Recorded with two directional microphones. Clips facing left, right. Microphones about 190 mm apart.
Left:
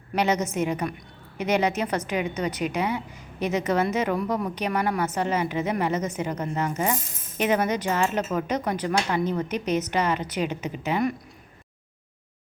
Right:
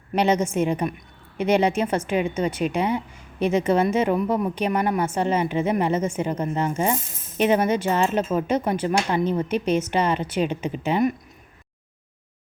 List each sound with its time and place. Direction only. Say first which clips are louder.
0.1 s a woman's voice: right 3 dB; 30° right (ahead or behind)